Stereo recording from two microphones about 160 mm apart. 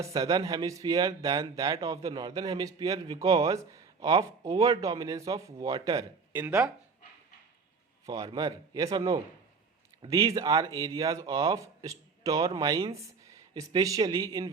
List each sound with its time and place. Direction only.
0.0 s speech: 20° right (ahead or behind)
8.0 s speech: 25° right (ahead or behind)